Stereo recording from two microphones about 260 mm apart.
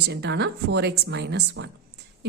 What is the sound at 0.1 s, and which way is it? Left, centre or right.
A woman's voice, right.